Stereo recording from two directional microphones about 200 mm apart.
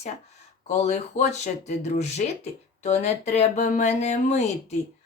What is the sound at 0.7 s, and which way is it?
A woman's voice, 35° left (ahead or behind).